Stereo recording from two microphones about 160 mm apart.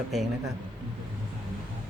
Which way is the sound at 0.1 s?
Centre (ahead or behind).